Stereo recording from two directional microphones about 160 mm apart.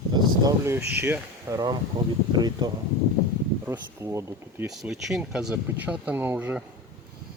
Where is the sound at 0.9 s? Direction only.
15° right (ahead or behind).